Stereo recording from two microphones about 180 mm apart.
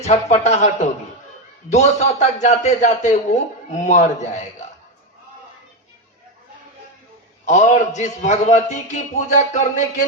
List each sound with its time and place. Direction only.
0.0 s a man's voice: 40° left (ahead or behind)
7.4 s a man's voice: 40° left (ahead or behind)